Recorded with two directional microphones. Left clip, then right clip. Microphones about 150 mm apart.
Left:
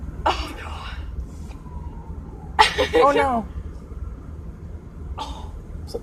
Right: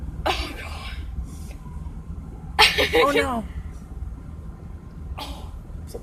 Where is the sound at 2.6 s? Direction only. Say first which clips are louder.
Left 1 dB; 50° right (ahead or behind).